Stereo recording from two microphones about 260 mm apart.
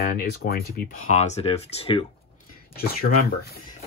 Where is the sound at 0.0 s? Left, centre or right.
Left.